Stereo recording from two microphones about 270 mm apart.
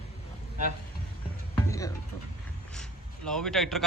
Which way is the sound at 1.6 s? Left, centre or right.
Centre.